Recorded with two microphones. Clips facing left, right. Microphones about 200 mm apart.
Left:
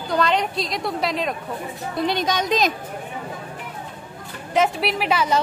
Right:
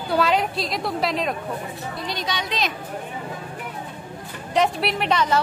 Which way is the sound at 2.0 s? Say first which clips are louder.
Left 8 dB; 50° left (ahead or behind).